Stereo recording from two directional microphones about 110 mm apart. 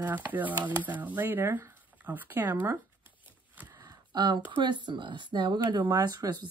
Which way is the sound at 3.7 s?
35° right (ahead or behind).